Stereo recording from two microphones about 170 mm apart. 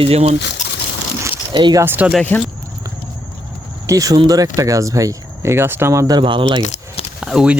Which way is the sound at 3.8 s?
20° right (ahead or behind).